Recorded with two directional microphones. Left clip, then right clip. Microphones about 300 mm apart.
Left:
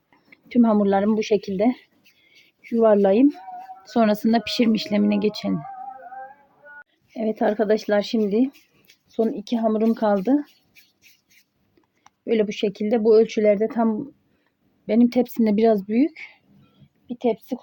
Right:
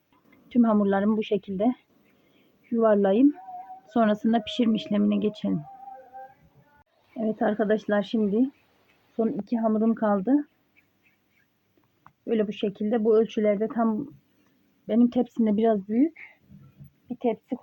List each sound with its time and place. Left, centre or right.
0.3 s speech: left
7.2 s speech: left
12.2 s speech: left